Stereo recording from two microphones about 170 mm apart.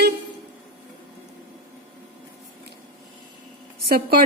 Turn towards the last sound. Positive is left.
turn(degrees=-60)  # may be behind; listen again after turning